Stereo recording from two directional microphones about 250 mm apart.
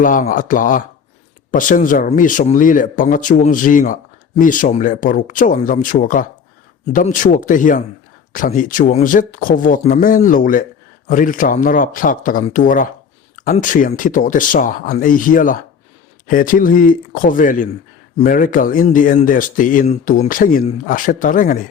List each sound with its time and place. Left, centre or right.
0.0 s speech: left